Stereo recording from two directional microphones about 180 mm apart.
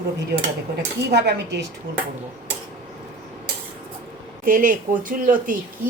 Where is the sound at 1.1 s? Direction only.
65° right (ahead or behind).